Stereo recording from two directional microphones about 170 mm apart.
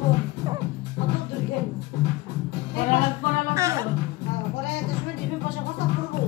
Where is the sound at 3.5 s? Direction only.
20° right (ahead or behind).